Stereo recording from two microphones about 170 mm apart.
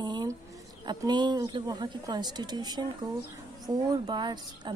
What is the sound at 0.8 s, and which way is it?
Speech, 25° right (ahead or behind).